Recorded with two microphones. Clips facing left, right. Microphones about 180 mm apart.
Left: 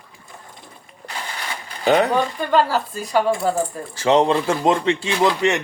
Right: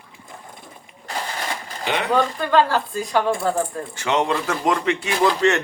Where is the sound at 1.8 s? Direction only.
40° left (ahead or behind).